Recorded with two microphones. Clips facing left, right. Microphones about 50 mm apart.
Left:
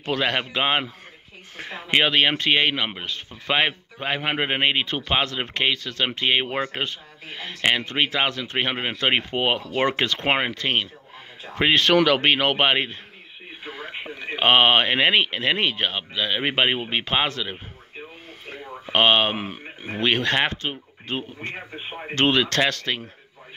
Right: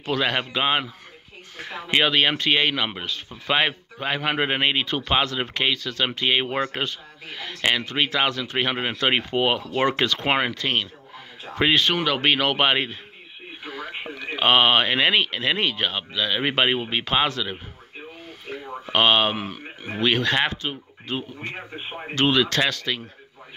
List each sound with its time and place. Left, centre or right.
0.0 s speech: left
11.8 s speech: left
12.2 s speech: left
14.1 s speech: left